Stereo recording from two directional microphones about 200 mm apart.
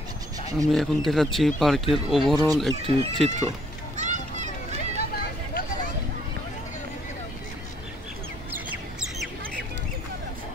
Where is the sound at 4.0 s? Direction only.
35° right (ahead or behind).